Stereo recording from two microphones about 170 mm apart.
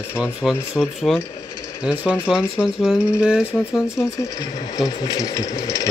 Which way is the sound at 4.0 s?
20° left (ahead or behind).